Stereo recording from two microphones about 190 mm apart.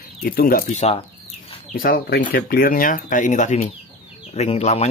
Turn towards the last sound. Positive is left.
turn(degrees=35)  # may be behind; listen again after turning